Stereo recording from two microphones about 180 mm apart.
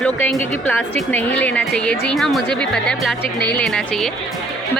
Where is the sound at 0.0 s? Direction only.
5° left (ahead or behind).